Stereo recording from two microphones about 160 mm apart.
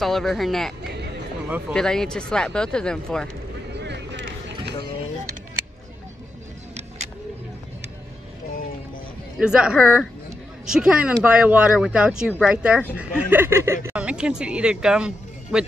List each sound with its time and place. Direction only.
0.0 s speech: centre (ahead or behind)
3.8 s vehicle: 90° right
9.4 s speech: 5° right (ahead or behind)